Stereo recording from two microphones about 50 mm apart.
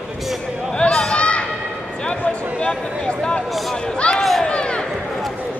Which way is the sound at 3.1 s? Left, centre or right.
Centre.